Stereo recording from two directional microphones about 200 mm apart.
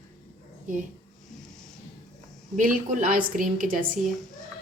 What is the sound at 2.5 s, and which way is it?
A woman's voice, 40° right (ahead or behind).